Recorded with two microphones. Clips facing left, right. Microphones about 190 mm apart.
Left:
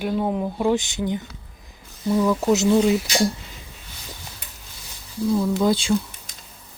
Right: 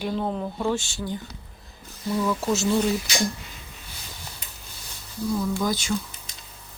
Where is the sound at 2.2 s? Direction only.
15° left (ahead or behind).